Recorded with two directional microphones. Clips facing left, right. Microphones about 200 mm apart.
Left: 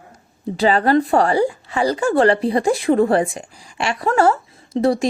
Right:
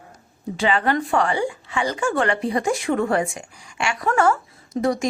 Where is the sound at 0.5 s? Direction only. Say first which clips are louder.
Left 6 dB; 35° left (ahead or behind).